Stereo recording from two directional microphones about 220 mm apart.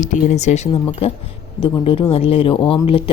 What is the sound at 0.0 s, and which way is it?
A woman's voice, 35° left (ahead or behind).